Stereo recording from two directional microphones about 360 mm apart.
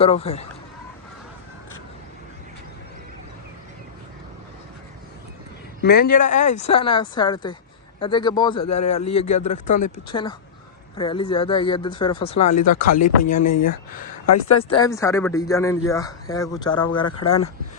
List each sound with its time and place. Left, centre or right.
0.0 s a man's voice: centre
5.8 s a man's voice: left
14.3 s speech: left
14.7 s a man's voice: centre